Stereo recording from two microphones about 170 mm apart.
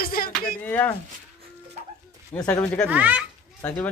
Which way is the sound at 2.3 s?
10° left (ahead or behind).